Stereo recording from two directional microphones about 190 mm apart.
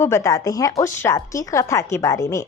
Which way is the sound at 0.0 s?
15° left (ahead or behind).